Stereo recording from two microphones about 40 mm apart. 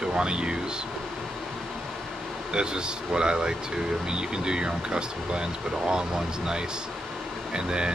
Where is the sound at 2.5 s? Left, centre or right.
Right.